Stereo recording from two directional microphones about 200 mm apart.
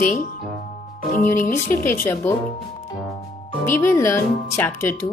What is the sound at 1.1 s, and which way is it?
Speech, 40° left (ahead or behind).